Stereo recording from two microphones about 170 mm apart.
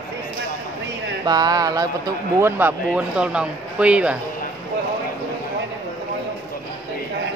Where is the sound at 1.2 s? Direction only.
25° right (ahead or behind); by 4.2 s 5° right (ahead or behind).